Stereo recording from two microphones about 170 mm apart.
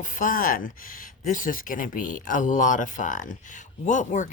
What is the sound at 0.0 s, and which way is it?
Speech, 50° left (ahead or behind).